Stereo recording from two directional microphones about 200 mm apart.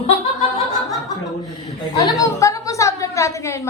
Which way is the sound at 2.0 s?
20° left (ahead or behind).